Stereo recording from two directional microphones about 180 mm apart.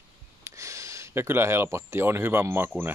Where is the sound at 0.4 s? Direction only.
15° right (ahead or behind).